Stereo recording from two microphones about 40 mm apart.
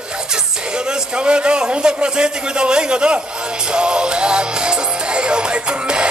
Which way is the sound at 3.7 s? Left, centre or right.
Right.